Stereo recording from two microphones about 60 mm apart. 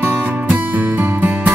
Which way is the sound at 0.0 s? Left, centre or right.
Right.